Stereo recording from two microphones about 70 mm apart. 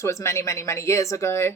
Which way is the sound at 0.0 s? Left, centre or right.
Left.